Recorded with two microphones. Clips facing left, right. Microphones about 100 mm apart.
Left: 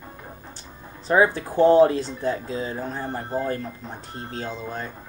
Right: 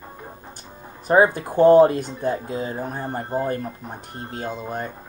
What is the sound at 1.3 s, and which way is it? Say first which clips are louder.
Speech: right 1 dB; 15° right (ahead or behind).